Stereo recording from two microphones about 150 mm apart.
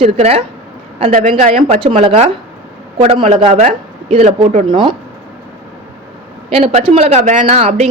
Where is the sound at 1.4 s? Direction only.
65° right (ahead or behind).